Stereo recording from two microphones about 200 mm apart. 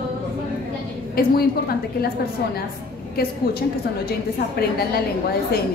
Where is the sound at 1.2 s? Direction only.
50° left (ahead or behind).